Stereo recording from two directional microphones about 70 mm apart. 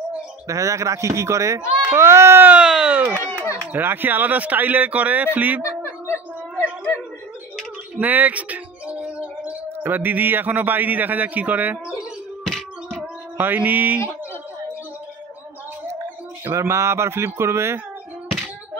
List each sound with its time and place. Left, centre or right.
0.5 s a man's voice: right
2.4 s speech: centre
3.7 s speech: right
5.8 s a sound: left
8.0 s speech: right
12.4 s music: centre
13.4 s speech: right
16.5 s speech: right